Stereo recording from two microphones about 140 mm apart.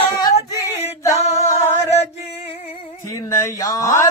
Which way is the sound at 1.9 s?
50° left (ahead or behind).